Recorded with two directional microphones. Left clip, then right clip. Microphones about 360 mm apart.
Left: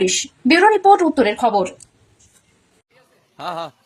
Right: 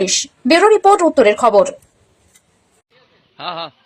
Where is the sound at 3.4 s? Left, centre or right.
Left.